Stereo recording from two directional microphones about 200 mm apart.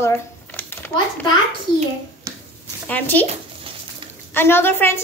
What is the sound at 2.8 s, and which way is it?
Speech, 10° left (ahead or behind).